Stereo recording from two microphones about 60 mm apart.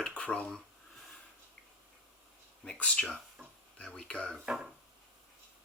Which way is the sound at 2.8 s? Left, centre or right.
Centre.